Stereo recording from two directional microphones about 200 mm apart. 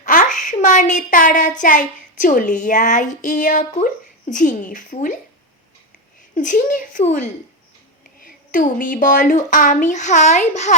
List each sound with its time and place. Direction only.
0.0 s a sound: 40° left (ahead or behind)
0.3 s child singing: 40° left (ahead or behind)
1.6 s a woman's voice: 40° left (ahead or behind)
6.3 s a woman's voice: 40° left (ahead or behind)